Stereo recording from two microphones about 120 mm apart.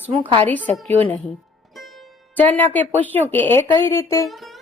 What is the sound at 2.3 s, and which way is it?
A woman's voice, 15° left (ahead or behind).